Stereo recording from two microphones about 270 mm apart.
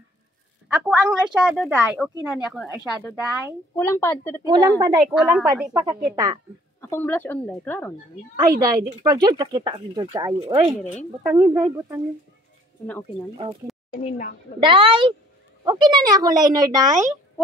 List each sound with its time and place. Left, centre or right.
0.7 s a woman's voice: centre
4.4 s a woman's voice: centre
6.8 s speech: centre
8.5 s speech: centre
14.0 s a woman's voice: left
14.6 s speech: centre